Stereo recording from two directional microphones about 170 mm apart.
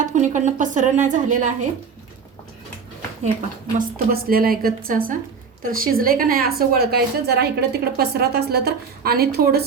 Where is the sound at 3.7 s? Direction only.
60° right (ahead or behind).